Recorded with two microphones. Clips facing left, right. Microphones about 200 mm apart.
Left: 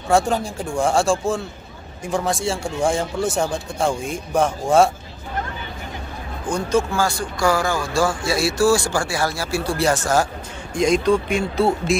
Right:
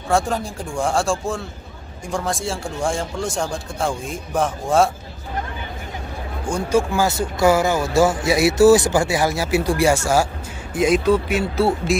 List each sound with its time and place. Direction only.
0.1 s speech: centre (ahead or behind)
6.5 s speech: 15° right (ahead or behind)